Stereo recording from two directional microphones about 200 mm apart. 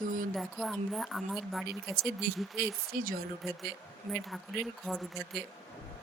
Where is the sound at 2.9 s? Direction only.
45° right (ahead or behind).